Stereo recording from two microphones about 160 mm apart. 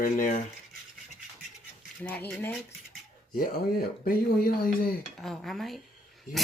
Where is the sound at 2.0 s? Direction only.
10° left (ahead or behind).